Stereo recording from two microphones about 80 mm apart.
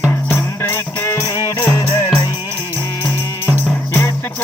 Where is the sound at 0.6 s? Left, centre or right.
Left.